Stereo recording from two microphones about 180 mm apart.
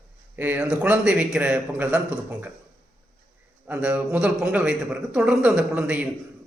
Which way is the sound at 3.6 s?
10° right (ahead or behind).